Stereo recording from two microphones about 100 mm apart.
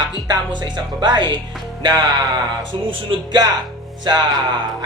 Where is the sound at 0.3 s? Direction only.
50° right (ahead or behind).